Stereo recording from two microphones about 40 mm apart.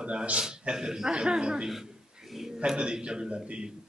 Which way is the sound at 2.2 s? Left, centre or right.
Centre.